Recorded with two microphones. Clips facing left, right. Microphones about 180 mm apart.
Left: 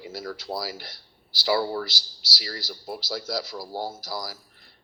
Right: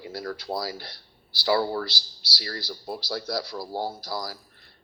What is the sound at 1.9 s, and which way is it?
Speech, 90° left.